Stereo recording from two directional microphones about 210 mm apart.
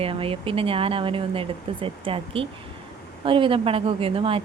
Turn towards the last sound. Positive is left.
turn(degrees=-25)  # may be behind; listen again after turning